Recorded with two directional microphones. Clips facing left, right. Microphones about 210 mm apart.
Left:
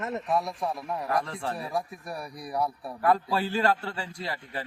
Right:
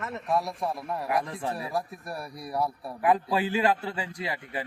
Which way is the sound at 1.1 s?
15° right (ahead or behind).